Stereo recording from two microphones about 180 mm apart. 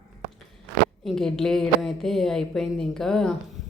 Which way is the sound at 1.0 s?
Centre (ahead or behind).